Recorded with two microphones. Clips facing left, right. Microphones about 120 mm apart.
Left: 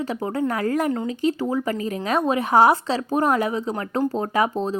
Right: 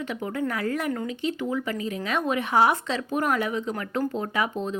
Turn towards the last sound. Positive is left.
turn(degrees=35)  # may be behind; listen again after turning